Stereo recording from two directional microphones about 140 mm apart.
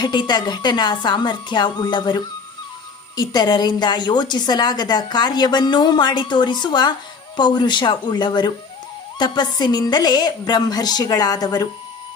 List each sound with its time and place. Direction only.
0.0 s a woman's voice: 30° left (ahead or behind)